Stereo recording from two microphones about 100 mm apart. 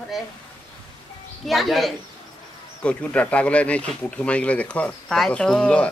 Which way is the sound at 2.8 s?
10° left (ahead or behind).